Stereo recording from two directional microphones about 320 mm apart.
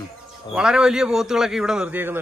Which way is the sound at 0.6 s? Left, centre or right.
Centre.